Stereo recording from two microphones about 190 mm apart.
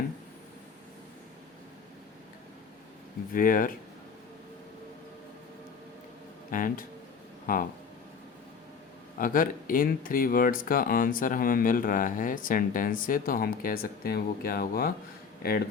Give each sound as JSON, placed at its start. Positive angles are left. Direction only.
{"t": 3.3, "sound": "speech", "side_deg": 45}
{"t": 6.5, "sound": "speech", "side_deg": 45}
{"t": 9.1, "sound": "speech", "side_deg": 45}